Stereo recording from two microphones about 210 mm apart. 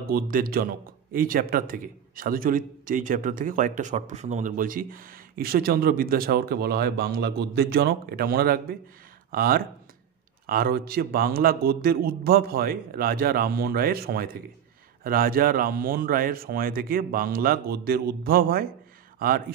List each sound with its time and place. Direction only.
0.0 s a man's voice: 45° right (ahead or behind)